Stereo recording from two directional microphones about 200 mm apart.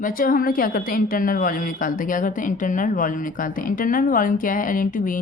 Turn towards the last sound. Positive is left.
turn(degrees=40)  # may be behind; listen again after turning